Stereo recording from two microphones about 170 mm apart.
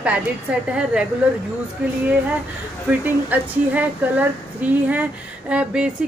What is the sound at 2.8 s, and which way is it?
A woman's voice, 10° right (ahead or behind).